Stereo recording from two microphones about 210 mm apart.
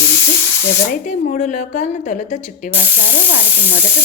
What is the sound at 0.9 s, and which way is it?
A woman's voice, 40° left (ahead or behind).